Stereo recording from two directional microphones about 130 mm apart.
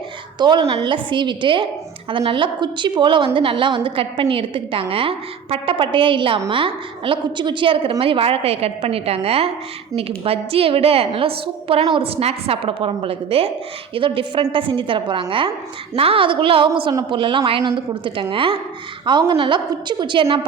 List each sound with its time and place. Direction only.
0.3 s a woman's voice: 35° right (ahead or behind)
16.9 s speech: 25° right (ahead or behind)
17.2 s a woman's voice: 40° right (ahead or behind)